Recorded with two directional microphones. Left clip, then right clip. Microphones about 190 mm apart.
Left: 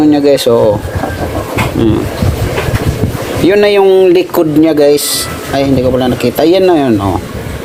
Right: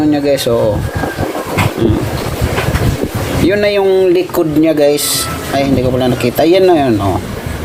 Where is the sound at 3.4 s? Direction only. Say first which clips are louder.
Left 5 dB; 45° left (ahead or behind).